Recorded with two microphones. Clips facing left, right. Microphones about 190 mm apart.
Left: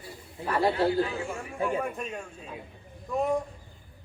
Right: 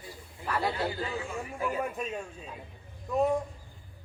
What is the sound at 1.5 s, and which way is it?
Speech, 25° left (ahead or behind).